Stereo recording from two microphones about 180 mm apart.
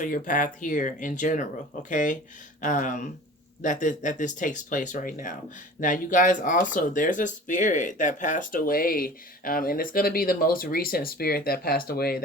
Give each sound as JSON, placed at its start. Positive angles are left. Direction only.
{"t": 0.0, "sound": "speech", "side_deg": 45}